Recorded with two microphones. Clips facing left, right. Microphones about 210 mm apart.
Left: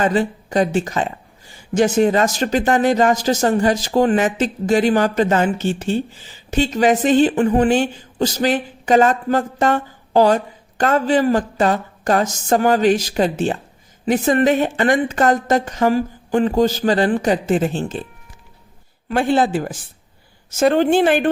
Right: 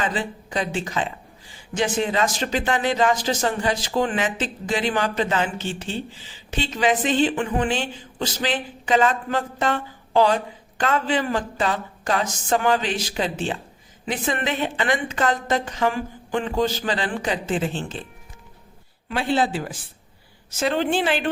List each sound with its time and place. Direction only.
0.0 s speech: 45° left (ahead or behind)
19.0 s speech: 50° left (ahead or behind)